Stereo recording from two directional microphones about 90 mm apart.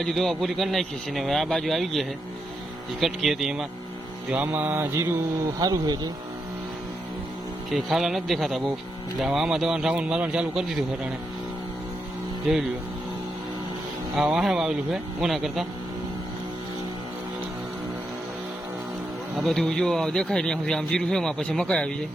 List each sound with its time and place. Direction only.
0.0 s speech: centre (ahead or behind)
4.3 s music: 15° right (ahead or behind)
5.5 s speech: 45° right (ahead or behind)
7.7 s speech: 5° right (ahead or behind)
14.3 s speech: 5° right (ahead or behind)
19.4 s speech: 5° left (ahead or behind)